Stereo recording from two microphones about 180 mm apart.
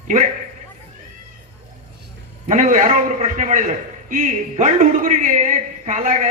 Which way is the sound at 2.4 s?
45° right (ahead or behind).